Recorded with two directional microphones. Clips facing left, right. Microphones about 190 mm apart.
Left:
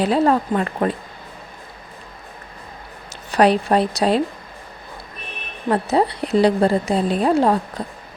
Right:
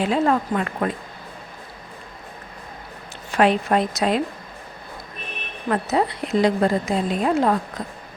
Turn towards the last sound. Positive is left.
turn(degrees=30)  # may be behind; listen again after turning